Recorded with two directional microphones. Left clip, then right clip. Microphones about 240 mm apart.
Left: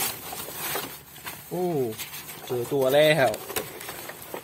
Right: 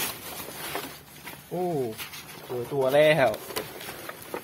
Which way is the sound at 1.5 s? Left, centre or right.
Left.